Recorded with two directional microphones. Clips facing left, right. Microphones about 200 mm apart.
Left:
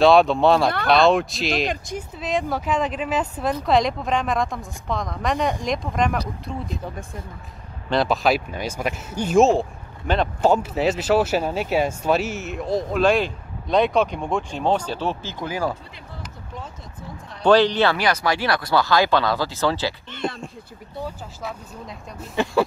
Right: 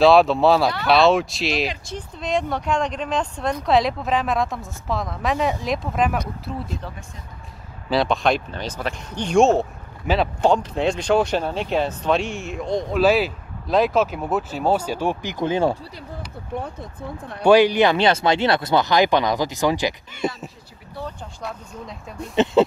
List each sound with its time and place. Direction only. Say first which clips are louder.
0.0 s speech: right 1 dB; centre (ahead or behind)
7.9 s speech: even; centre (ahead or behind)
10.4 s speech: left 1 dB; 5° left (ahead or behind); by 15.3 s 10° right (ahead or behind)
15.4 s speech: right 6 dB; 25° right (ahead or behind)
16.5 s speech: right 8 dB; 60° right (ahead or behind)
17.4 s speech: right 2 dB; 10° right (ahead or behind)
22.3 s speech: right 4 dB; 20° right (ahead or behind)